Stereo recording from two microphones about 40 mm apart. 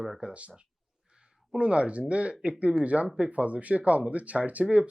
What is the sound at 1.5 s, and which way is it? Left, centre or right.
Speech, right.